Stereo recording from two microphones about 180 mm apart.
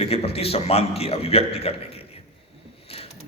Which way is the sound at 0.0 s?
35° left (ahead or behind).